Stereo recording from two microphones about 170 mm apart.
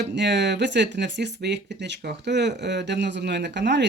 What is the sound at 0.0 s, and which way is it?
Speech, 90° right.